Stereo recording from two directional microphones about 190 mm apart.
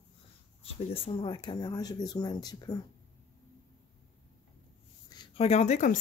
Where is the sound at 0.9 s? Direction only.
25° left (ahead or behind).